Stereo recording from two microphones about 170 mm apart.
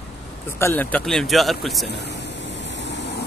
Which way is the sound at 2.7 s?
90° left.